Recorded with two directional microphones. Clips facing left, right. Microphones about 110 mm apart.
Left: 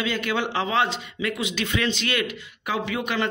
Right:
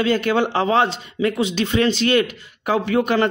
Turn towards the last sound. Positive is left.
turn(degrees=-40)  # may be behind; listen again after turning